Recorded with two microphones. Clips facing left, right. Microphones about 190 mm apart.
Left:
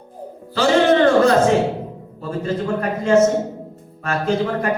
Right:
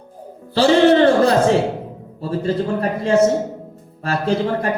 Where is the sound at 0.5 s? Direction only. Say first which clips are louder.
Right 3 dB; 35° right (ahead or behind).